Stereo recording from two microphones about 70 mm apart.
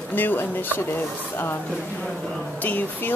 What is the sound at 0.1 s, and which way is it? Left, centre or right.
Speech, left.